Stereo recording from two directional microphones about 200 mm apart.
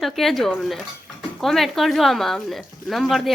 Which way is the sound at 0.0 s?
Centre (ahead or behind).